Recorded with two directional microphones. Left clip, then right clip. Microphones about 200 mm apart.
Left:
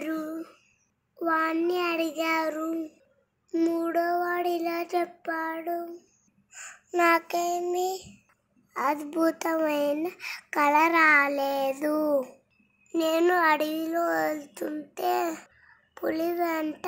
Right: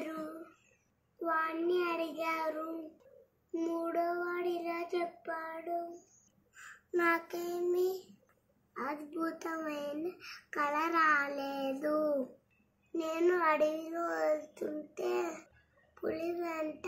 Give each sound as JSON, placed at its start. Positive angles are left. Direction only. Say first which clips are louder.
{"t": 1.2, "sound": "child singing", "louder": "left 8 dB", "side_deg": 50}
{"t": 3.5, "sound": "child singing", "louder": "left 8 dB", "side_deg": 50}
{"t": 6.5, "sound": "a child's voice", "louder": "left 6 dB", "side_deg": 35}
{"t": 8.7, "sound": "a child's voice", "louder": "left 12 dB", "side_deg": 45}